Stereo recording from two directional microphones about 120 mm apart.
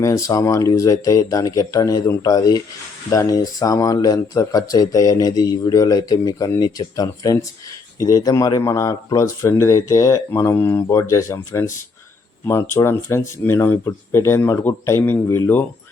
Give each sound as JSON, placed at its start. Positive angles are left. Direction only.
{"t": 0.0, "sound": "speech", "side_deg": 30}